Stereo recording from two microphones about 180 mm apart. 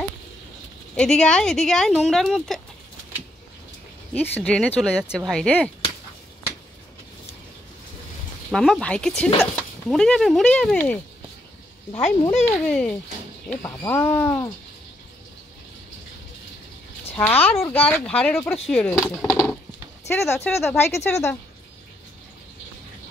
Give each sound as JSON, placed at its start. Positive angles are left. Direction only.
{"t": 0.9, "sound": "speech", "side_deg": 5}
{"t": 4.1, "sound": "speech", "side_deg": 5}
{"t": 8.5, "sound": "speech", "side_deg": 0}
{"t": 12.0, "sound": "speech", "side_deg": 35}
{"t": 12.4, "sound": "speech", "side_deg": 5}
{"t": 17.2, "sound": "speech", "side_deg": 10}
{"t": 20.1, "sound": "speech", "side_deg": 15}